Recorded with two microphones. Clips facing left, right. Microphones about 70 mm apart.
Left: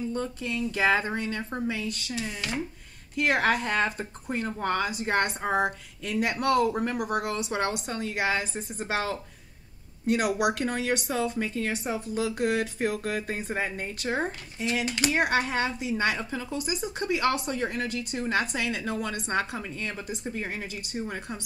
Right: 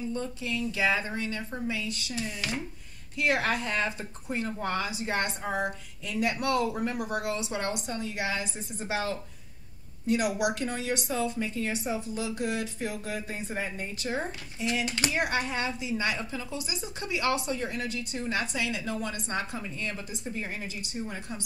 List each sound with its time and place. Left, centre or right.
0.1 s speech: left
3.2 s speech: left